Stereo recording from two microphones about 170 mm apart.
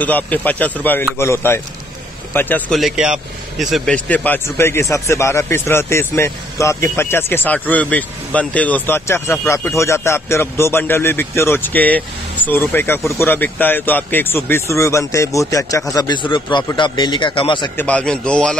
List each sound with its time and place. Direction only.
0.0 s a man's voice: 10° left (ahead or behind)
2.8 s a man's voice: centre (ahead or behind); by 17.6 s 30° left (ahead or behind)
17.7 s a man's voice: 10° left (ahead or behind)